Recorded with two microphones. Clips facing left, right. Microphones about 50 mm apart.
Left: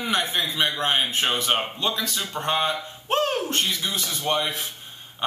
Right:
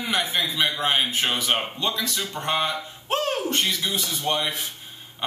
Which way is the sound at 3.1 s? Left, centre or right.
Centre.